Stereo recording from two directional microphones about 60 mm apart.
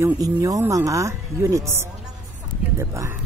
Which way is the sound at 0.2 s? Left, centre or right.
Right.